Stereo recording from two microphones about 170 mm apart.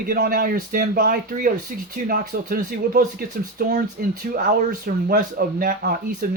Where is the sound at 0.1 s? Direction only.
60° right (ahead or behind).